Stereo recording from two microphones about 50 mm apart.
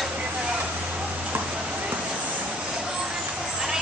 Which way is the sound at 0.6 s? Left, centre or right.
Right.